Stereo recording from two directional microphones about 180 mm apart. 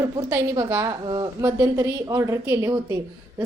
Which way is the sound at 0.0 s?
15° right (ahead or behind).